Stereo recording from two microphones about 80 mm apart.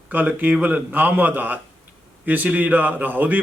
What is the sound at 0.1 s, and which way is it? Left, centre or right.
A man's voice, right.